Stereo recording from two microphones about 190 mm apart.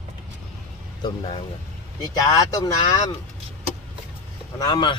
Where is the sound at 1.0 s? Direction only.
25° left (ahead or behind).